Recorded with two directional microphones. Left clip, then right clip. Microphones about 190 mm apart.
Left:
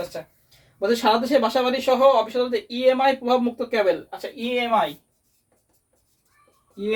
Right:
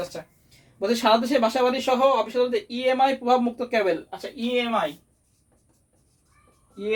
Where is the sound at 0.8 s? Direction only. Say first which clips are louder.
Left 1 dB; 30° right (ahead or behind).